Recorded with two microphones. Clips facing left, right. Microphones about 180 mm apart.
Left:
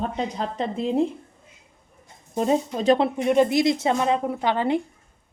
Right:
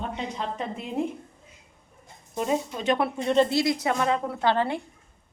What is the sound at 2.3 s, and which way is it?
Speech, 35° left (ahead or behind).